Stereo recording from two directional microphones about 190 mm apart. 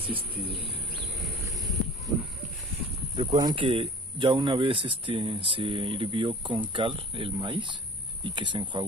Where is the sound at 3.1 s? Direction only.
25° right (ahead or behind).